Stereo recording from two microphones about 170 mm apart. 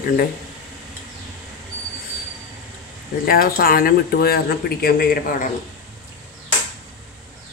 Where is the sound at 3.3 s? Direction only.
60° left (ahead or behind).